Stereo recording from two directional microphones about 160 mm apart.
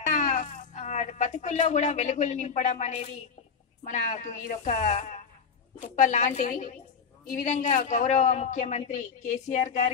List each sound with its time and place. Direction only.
0.0 s a man's voice: 50° left (ahead or behind)